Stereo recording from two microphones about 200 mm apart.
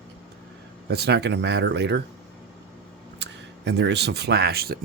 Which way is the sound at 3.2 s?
60° right (ahead or behind).